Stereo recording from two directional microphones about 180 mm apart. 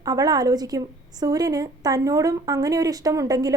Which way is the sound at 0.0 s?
20° right (ahead or behind).